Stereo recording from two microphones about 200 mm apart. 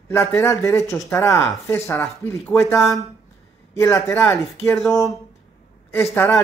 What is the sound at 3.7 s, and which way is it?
Speech, 15° left (ahead or behind).